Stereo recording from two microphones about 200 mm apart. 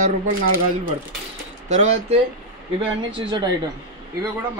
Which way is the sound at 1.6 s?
35° right (ahead or behind).